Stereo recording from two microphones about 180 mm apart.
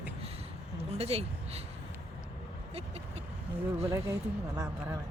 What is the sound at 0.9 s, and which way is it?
Speech, 35° right (ahead or behind).